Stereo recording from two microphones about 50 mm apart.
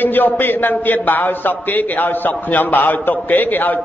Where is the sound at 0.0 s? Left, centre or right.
Left.